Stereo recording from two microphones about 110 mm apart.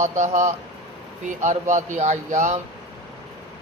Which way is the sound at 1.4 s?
90° right.